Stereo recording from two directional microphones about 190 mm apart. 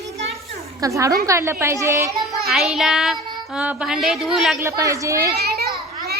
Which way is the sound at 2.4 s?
Centre (ahead or behind).